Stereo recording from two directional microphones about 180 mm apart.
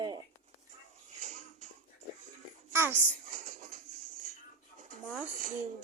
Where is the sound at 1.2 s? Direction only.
40° right (ahead or behind).